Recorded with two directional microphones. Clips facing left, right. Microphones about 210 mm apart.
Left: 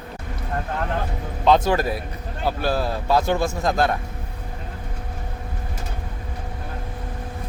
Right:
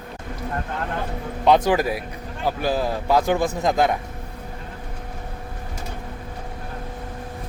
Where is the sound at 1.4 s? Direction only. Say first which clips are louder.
Right 1 dB; 15° right (ahead or behind).